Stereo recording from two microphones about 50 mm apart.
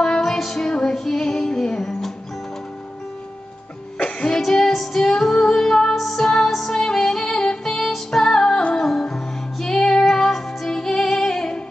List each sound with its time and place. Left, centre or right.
0.0 s female singing: centre
4.0 s music: left
4.4 s music: centre